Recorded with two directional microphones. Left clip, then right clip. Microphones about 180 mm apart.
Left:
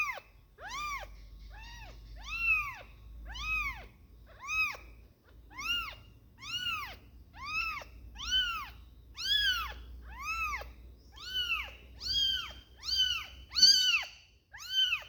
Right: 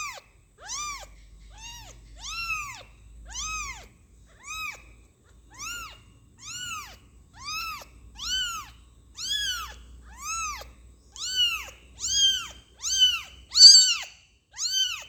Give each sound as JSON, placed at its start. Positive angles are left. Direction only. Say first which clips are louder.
{"t": 0.0, "sound": "cat", "louder": "left 1 dB", "side_deg": 5}
{"t": 4.4, "sound": "a sound", "louder": "left 3 dB", "side_deg": 25}
{"t": 5.5, "sound": "cat", "louder": "left 3 dB", "side_deg": 15}
{"t": 11.1, "sound": "cat", "louder": "right 8 dB", "side_deg": -5}